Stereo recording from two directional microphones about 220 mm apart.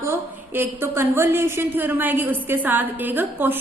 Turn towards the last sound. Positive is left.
turn(degrees=-10)  # may be behind; listen again after turning